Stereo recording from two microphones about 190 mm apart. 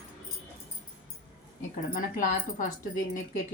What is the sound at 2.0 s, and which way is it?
Speech, 45° left (ahead or behind).